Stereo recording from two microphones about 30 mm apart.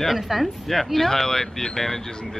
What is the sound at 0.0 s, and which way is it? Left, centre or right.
Speech, centre.